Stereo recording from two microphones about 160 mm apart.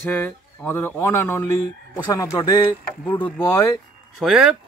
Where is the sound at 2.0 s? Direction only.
25° left (ahead or behind).